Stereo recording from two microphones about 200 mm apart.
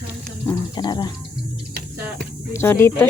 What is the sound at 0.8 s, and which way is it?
Speech, 20° left (ahead or behind).